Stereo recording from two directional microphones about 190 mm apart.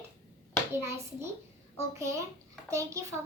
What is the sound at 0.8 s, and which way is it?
A child's voice, 15° right (ahead or behind).